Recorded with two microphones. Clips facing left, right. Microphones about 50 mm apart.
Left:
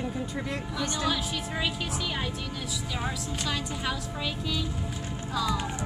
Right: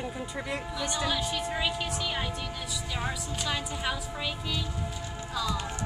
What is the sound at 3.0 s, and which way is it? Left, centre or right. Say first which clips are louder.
A woman's voice: even; centre.